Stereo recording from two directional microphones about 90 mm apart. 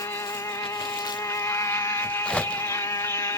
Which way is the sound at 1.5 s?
30° left (ahead or behind).